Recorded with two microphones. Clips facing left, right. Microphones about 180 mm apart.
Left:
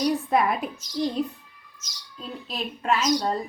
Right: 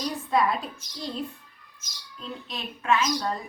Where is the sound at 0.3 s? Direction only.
25° left (ahead or behind).